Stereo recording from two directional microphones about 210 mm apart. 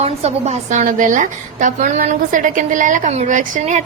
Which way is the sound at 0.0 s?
30° right (ahead or behind).